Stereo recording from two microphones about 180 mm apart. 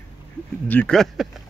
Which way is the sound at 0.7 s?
5° left (ahead or behind).